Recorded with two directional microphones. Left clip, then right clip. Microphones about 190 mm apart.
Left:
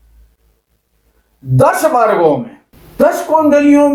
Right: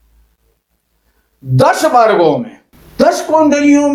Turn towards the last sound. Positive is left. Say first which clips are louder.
# left 1 dB
turn(degrees=-20)  # may be behind; listen again after turning